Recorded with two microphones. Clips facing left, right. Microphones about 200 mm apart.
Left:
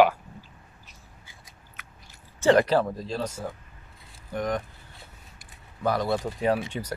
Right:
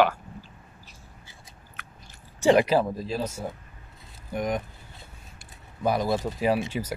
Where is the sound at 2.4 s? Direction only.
10° right (ahead or behind).